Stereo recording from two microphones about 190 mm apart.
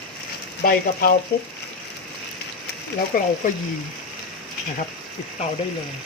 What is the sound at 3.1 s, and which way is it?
Speech, 45° left (ahead or behind).